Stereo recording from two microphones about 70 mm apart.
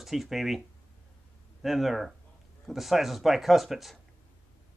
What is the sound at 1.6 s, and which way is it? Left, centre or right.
Speech, centre.